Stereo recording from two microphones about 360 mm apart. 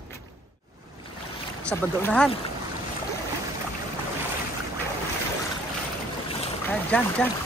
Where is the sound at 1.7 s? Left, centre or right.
Centre.